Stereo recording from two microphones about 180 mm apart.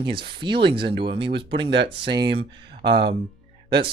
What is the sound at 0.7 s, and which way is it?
Speech, 65° right (ahead or behind).